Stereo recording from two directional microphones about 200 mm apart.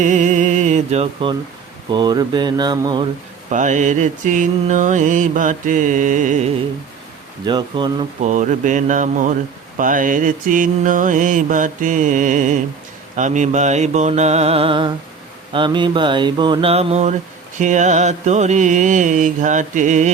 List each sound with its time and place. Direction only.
0.0 s mantra: 40° right (ahead or behind); by 3.1 s 20° right (ahead or behind)
3.5 s mantra: 40° right (ahead or behind)
7.4 s mantra: 20° right (ahead or behind)
8.2 s mantra: 35° right (ahead or behind)